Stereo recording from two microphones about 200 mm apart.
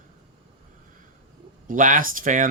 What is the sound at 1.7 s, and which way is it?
Speech, 40° right (ahead or behind).